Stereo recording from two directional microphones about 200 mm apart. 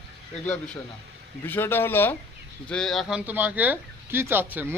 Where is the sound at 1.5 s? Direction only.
10° left (ahead or behind).